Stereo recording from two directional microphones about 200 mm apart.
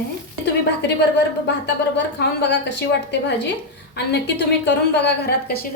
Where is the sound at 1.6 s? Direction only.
60° left (ahead or behind).